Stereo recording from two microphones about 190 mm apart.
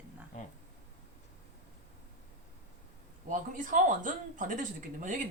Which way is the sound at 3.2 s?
45° right (ahead or behind).